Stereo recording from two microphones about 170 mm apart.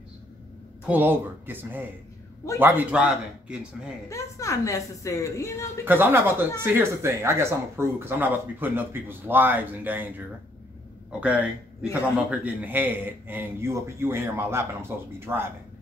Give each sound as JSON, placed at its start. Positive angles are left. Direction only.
{"t": 0.8, "sound": "speech", "side_deg": -10}
{"t": 4.1, "sound": "a woman's voice", "side_deg": 20}
{"t": 5.9, "sound": "speech", "side_deg": -10}